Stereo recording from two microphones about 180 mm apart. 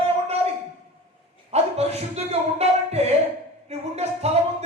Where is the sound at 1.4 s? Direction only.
35° right (ahead or behind).